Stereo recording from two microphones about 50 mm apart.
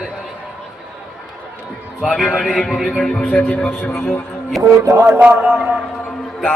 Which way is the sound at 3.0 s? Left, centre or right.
Left.